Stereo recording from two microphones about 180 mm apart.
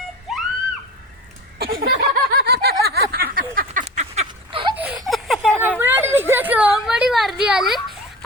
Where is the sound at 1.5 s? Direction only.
60° right (ahead or behind).